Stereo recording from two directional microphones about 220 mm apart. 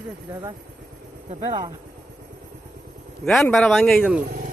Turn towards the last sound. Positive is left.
turn(degrees=0)  # may be behind; listen again after turning